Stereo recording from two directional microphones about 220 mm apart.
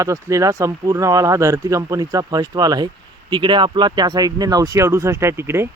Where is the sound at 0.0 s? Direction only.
15° right (ahead or behind).